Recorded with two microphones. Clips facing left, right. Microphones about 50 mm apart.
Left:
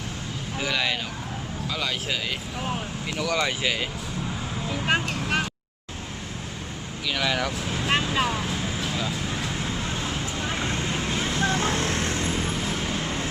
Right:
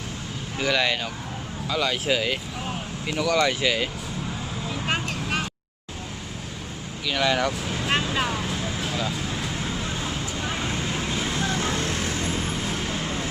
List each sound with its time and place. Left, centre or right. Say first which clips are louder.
0.6 s speech: right 3 dB; centre
2.0 s speech: right 5 dB; centre
3.2 s speech: right 4 dB; centre
4.7 s vehicle: left 3 dB; centre
7.1 s vehicle: right 3 dB; centre
9.7 s vehicle: even; left
10.3 s vehicle: even; centre
11.0 s vehicle: even; left
11.3 s vehicle: left 3 dB; left
12.4 s vehicle: even; centre